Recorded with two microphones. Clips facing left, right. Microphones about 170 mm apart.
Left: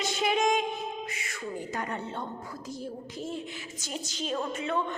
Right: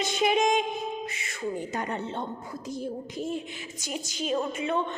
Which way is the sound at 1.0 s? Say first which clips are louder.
Right 4 dB; 25° right (ahead or behind).